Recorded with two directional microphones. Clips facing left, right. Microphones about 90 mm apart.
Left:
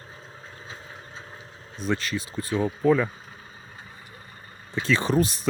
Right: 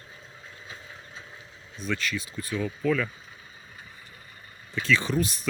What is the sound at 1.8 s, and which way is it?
Speech, 35° left (ahead or behind).